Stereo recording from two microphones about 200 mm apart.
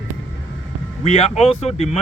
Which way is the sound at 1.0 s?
30° left (ahead or behind).